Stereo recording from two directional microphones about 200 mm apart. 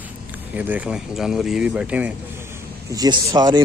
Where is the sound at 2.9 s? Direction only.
20° right (ahead or behind).